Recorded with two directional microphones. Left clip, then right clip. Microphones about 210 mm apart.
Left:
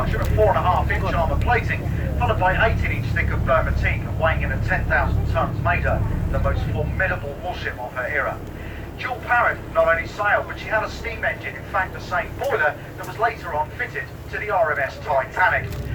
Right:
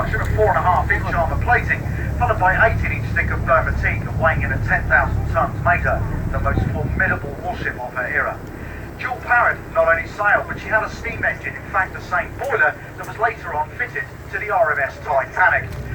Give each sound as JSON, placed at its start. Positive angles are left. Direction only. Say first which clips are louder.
{"t": 0.0, "sound": "speech", "louder": "right 1 dB", "side_deg": 50}